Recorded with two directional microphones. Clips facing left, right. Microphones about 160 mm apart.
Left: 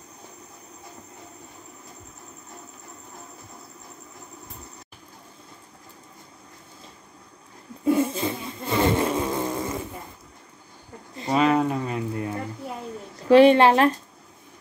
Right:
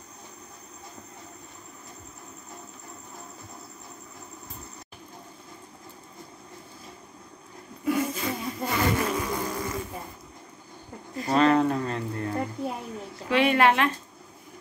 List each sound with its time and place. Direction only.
7.8 s cat: 30° left (ahead or behind)
11.3 s a sound: 5° left (ahead or behind)
13.3 s a woman's voice: 30° left (ahead or behind)